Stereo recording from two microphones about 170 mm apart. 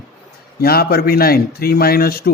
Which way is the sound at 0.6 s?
65° left (ahead or behind).